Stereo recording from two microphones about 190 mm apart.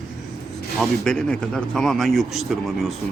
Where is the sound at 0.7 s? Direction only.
5° left (ahead or behind).